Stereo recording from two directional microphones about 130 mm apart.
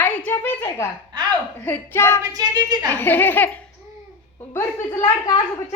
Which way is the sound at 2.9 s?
15° left (ahead or behind).